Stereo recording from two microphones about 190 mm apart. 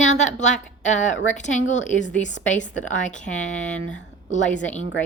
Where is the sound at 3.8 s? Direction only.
90° left.